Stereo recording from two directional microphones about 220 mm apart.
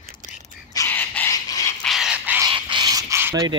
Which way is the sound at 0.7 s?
10° left (ahead or behind).